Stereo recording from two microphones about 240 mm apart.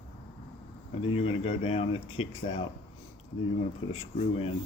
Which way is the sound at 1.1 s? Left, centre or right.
Left.